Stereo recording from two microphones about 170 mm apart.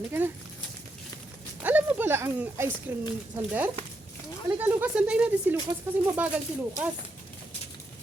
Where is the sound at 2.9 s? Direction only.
10° right (ahead or behind).